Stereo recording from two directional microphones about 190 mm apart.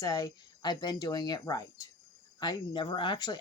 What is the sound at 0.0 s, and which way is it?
Speech, 20° left (ahead or behind).